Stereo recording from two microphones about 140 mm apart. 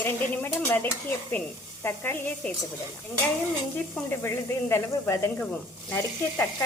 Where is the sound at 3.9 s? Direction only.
15° left (ahead or behind).